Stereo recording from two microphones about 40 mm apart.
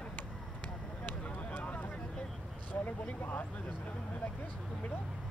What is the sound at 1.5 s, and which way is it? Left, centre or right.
Vehicle, left.